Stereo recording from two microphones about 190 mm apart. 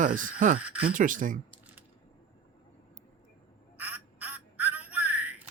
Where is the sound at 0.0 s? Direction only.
45° right (ahead or behind).